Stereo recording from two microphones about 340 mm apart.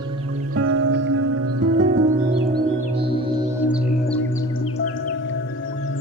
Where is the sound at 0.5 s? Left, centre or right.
Right.